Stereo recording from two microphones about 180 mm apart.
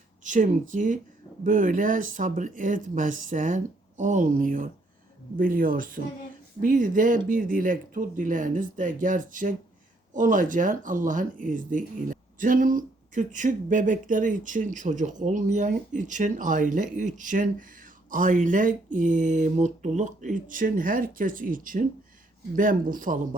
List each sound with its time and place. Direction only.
0.3 s speech: 45° right (ahead or behind)